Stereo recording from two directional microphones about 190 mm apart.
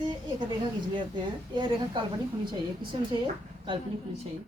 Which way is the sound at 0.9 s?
25° right (ahead or behind).